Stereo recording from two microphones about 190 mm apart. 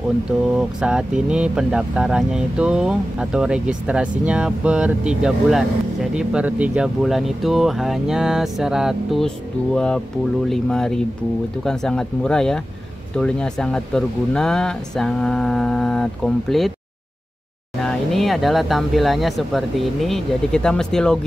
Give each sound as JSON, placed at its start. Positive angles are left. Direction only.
{"t": 0.5, "sound": "speech", "side_deg": -5}
{"t": 17.8, "sound": "speech", "side_deg": 0}